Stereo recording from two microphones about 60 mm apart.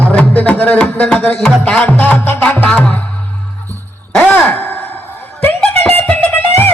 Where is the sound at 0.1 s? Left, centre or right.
Left.